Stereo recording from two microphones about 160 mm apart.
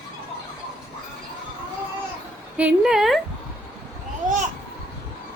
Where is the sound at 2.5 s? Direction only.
5° right (ahead or behind).